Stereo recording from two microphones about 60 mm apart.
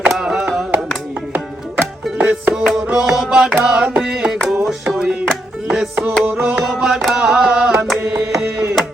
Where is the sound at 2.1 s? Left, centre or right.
Right.